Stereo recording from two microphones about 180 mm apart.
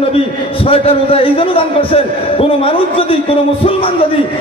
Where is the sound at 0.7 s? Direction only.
30° left (ahead or behind).